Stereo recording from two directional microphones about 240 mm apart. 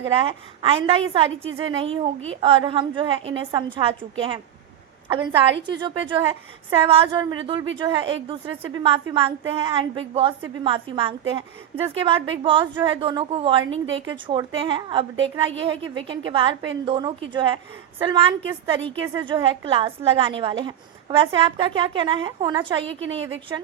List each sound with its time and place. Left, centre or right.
0.2 s a woman's voice: right
5.1 s a woman's voice: right